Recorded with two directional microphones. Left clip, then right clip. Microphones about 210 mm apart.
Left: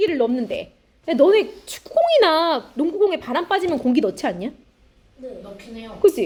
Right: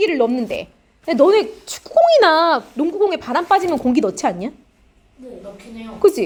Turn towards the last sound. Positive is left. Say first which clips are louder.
# right 2 dB
turn(degrees=-15)  # may be behind; listen again after turning